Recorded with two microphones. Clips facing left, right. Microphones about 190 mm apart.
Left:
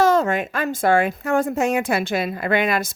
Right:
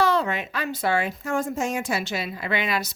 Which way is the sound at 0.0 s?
45° left (ahead or behind).